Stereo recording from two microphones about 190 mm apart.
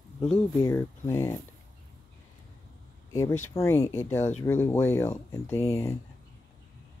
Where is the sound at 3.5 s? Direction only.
15° left (ahead or behind).